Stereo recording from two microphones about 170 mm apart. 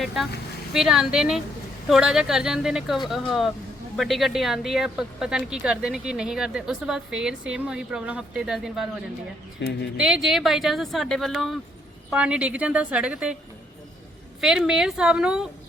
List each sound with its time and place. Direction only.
0.0 s a woman's voice: centre (ahead or behind)
9.6 s speech: 90° left
10.0 s a woman's voice: 5° right (ahead or behind)
14.4 s a woman's voice: 5° right (ahead or behind)